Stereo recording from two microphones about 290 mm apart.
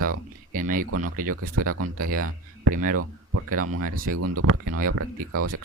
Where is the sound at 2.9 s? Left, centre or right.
Right.